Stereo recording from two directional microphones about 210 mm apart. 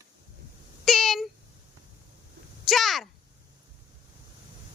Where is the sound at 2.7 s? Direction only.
Centre (ahead or behind).